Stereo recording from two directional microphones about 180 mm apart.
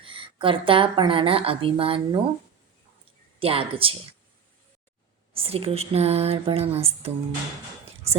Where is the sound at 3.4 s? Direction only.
30° right (ahead or behind).